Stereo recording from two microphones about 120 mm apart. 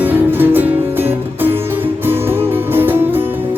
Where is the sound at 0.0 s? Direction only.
15° right (ahead or behind).